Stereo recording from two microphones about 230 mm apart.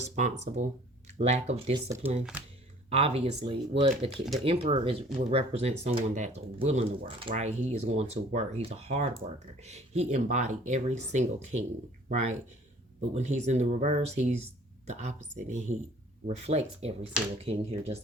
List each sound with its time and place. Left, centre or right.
0.0 s speech: right
4.1 s speech: centre
4.4 s speech: right